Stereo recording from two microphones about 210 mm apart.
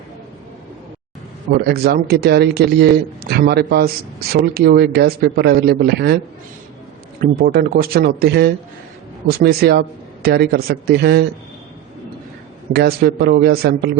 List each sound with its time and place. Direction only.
1.5 s a man's voice: 50° right (ahead or behind)
7.2 s a man's voice: 45° right (ahead or behind)
12.7 s a man's voice: 50° right (ahead or behind)